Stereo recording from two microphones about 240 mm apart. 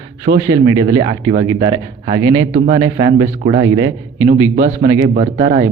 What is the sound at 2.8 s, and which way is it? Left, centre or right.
Speech, centre.